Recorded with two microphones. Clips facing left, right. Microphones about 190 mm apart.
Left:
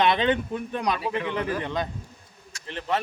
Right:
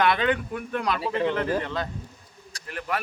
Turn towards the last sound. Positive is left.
turn(degrees=25)  # may be behind; listen again after turning